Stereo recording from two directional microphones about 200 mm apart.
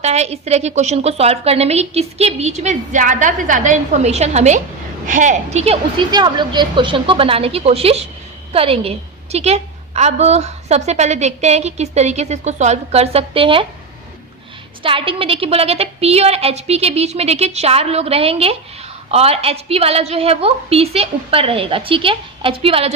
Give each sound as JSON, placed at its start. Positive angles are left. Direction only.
{"t": 0.0, "sound": "a woman's voice", "side_deg": -35}
{"t": 14.8, "sound": "a woman's voice", "side_deg": -25}